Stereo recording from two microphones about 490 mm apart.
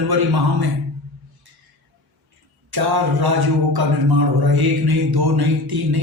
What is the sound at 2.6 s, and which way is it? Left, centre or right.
A man's voice, right.